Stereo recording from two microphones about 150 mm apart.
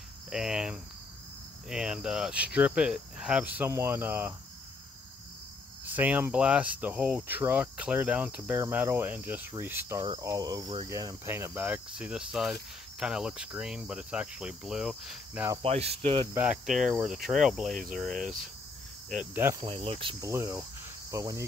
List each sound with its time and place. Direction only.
0.3 s speech: 5° right (ahead or behind)
5.9 s speech: 10° right (ahead or behind)
10.2 s cricket: 20° right (ahead or behind)
10.9 s speech: 20° right (ahead or behind); by 15.4 s 5° right (ahead or behind)
15.6 s speech: 45° right (ahead or behind)
16.0 s cricket: 40° right (ahead or behind)
16.3 s speech: 5° right (ahead or behind)
19.6 s cricket: 40° right (ahead or behind)
20.2 s cricket: 20° right (ahead or behind)